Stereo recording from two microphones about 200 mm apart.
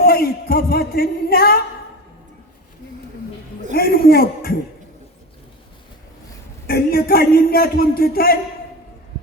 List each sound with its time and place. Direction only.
0.0 s speech: 50° left (ahead or behind)
3.8 s a man's voice: 50° left (ahead or behind)
6.7 s speech: 50° left (ahead or behind)